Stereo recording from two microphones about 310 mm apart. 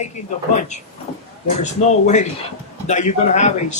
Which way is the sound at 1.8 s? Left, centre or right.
Left.